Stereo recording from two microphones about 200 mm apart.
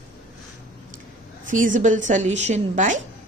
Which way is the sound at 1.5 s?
40° right (ahead or behind).